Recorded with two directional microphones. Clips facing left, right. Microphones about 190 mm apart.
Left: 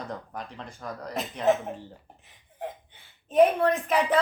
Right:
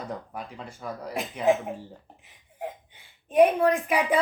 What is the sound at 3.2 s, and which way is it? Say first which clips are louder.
Speech: right 1 dB; 10° right (ahead or behind).